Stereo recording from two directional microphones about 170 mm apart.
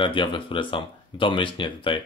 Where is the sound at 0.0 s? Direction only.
30° left (ahead or behind).